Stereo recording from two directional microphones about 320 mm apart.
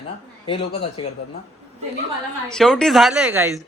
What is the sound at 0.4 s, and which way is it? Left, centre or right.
Speech, centre.